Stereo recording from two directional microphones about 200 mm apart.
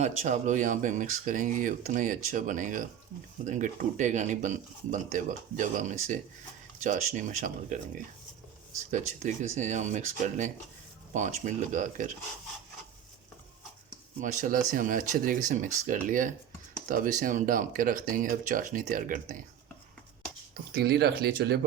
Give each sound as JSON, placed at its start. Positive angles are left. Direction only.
{"t": 0.0, "sound": "speech", "side_deg": -35}
{"t": 8.9, "sound": "speech", "side_deg": -35}
{"t": 14.2, "sound": "speech", "side_deg": -40}
{"t": 20.7, "sound": "speech", "side_deg": -50}